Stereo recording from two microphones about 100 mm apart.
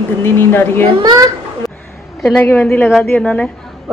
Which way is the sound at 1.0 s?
45° right (ahead or behind).